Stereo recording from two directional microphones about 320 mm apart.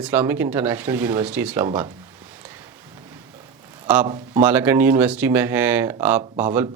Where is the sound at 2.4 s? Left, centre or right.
Centre.